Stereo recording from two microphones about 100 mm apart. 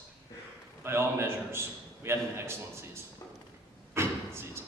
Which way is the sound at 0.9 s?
25° right (ahead or behind).